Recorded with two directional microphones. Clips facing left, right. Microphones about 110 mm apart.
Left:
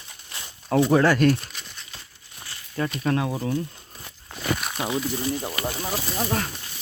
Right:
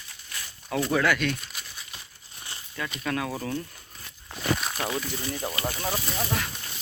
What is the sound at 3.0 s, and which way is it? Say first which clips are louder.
Speech: left 5 dB; 30° left (ahead or behind).